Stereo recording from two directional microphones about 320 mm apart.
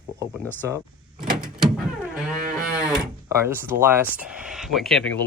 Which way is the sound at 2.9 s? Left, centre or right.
Centre.